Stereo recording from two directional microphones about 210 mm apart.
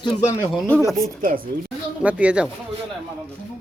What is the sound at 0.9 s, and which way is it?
Speech, centre (ahead or behind).